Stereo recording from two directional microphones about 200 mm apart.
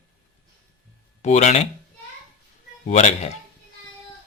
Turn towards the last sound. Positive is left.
turn(degrees=35)  # may be behind; listen again after turning